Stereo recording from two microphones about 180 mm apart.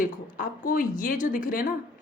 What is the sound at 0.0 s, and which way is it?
Speech, 50° left (ahead or behind).